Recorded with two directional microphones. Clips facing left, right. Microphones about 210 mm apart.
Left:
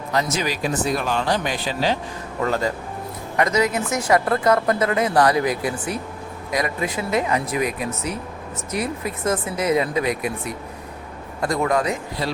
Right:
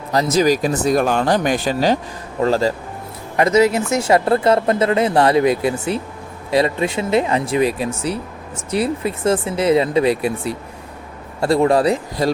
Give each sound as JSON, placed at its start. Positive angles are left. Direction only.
{"t": 0.1, "sound": "speech", "side_deg": -35}
{"t": 2.4, "sound": "speech", "side_deg": -30}